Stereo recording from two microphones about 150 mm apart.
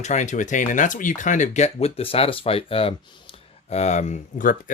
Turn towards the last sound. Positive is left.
turn(degrees=60)  # may be behind; listen again after turning